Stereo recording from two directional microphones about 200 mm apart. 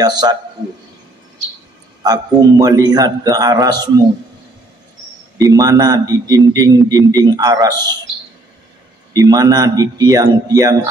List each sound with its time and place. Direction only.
0.0 s a man's voice: 20° right (ahead or behind)
2.0 s a man's voice: 15° right (ahead or behind)
5.4 s a man's voice: 20° right (ahead or behind)
9.1 s a man's voice: 20° right (ahead or behind)